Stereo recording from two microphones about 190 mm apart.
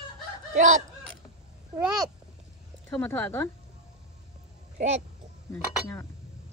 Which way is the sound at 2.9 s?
10° left (ahead or behind).